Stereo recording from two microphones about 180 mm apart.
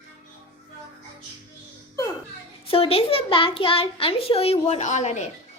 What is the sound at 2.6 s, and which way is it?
A child's voice, 30° left (ahead or behind).